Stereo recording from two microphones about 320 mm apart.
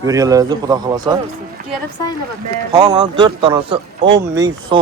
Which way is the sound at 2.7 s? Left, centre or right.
Centre.